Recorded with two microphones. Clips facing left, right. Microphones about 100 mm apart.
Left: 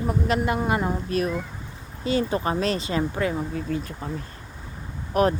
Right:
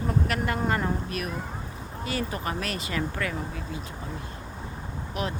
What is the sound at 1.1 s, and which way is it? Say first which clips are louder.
Speech: left 7 dB; 30° left (ahead or behind).